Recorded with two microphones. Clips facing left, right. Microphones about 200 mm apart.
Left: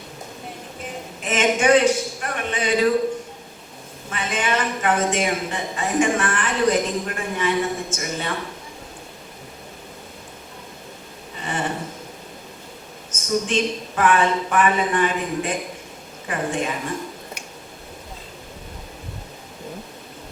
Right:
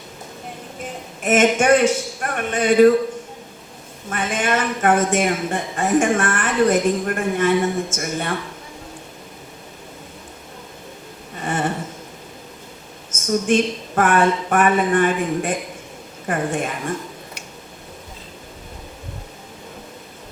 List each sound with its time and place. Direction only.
1.2 s speech: 50° right (ahead or behind)
4.1 s speech: 50° right (ahead or behind)
11.3 s a sound: 50° right (ahead or behind)
13.5 s speech: 50° right (ahead or behind)